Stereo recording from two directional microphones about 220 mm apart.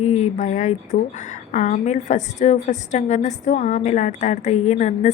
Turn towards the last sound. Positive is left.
turn(degrees=30)  # may be behind; listen again after turning